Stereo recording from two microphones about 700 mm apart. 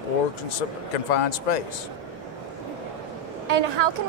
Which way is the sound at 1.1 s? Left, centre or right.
Left.